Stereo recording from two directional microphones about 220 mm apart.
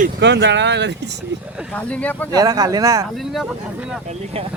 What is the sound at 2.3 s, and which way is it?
Speech, 15° right (ahead or behind).